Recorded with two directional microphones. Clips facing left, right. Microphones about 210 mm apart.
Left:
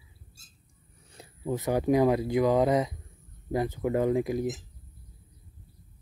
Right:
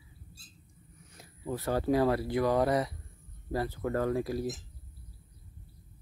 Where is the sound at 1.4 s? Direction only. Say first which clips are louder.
Left 4 dB; 15° left (ahead or behind).